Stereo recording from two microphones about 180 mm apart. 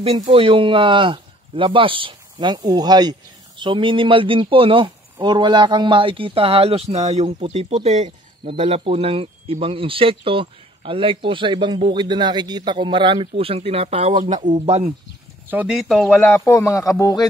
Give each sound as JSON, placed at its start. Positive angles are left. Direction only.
{"t": 0.0, "sound": "speech", "side_deg": -35}
{"t": 15.5, "sound": "speech", "side_deg": -5}